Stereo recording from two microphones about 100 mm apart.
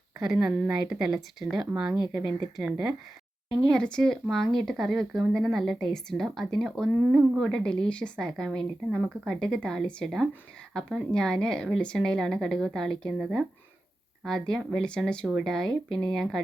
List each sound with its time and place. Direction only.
0.3 s speech: 5° right (ahead or behind)
3.5 s speech: 5° left (ahead or behind)
14.3 s speech: 5° left (ahead or behind)